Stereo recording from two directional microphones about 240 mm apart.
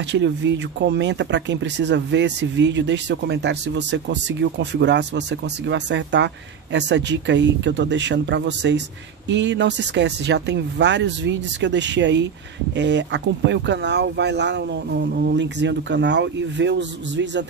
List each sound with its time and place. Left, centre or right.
0.0 s speech: right